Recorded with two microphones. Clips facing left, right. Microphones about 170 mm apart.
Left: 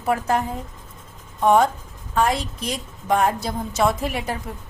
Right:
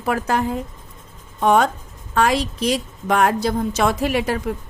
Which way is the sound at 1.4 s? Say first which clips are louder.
Even; 80° right.